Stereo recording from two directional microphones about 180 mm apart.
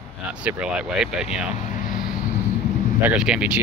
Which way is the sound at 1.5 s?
50° left (ahead or behind).